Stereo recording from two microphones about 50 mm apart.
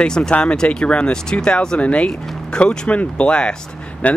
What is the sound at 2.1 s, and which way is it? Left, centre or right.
Speech, centre.